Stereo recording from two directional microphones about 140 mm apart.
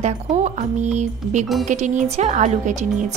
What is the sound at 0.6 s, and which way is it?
Speech, 60° right (ahead or behind).